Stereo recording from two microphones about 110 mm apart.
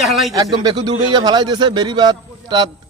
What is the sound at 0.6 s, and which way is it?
A man's voice, 45° right (ahead or behind).